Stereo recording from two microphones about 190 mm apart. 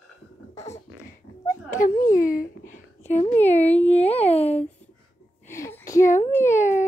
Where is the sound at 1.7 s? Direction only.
45° left (ahead or behind).